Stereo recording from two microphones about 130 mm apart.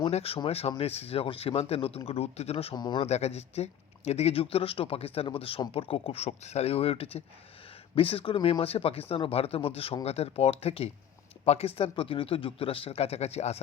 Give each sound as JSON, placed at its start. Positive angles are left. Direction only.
{"t": 0.0, "sound": "speech", "side_deg": 50}
{"t": 2.7, "sound": "speech", "side_deg": 35}
{"t": 3.0, "sound": "speech", "side_deg": 55}